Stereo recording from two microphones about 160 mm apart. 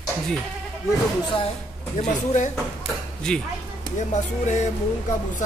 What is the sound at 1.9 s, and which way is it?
Speech, 50° left (ahead or behind).